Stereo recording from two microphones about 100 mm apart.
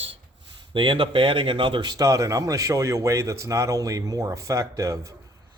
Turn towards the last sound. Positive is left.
turn(degrees=-30)  # may be behind; listen again after turning